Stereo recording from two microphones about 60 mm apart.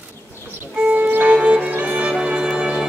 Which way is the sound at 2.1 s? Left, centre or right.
Centre.